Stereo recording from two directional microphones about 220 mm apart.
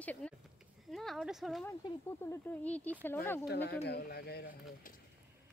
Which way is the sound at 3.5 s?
50° left (ahead or behind).